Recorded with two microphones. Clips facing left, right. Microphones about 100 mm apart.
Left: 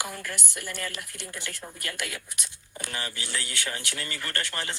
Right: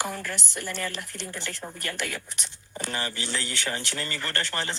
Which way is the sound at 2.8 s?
30° right (ahead or behind).